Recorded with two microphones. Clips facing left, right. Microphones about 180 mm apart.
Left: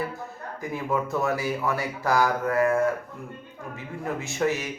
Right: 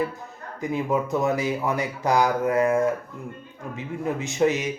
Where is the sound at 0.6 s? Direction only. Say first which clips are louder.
Right 3 dB; 20° right (ahead or behind).